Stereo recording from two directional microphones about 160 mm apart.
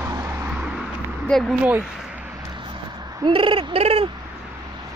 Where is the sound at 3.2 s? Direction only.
35° right (ahead or behind).